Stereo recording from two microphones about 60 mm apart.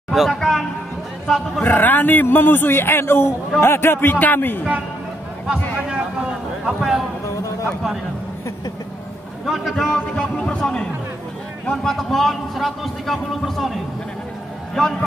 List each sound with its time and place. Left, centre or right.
0.1 s a sound: centre
1.6 s a man's voice: left
5.5 s a man's voice: centre
9.5 s speech: centre
9.8 s speech: centre